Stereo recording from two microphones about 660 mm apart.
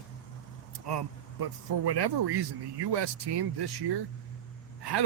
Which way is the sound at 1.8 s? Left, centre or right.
Right.